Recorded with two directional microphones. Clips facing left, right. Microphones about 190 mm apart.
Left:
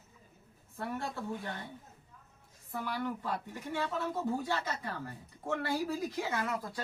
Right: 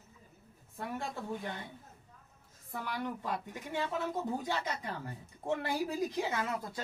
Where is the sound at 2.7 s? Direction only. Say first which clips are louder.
Left 2 dB; 15° right (ahead or behind).